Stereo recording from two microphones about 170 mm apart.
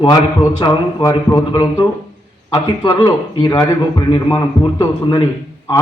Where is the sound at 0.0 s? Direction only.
25° left (ahead or behind).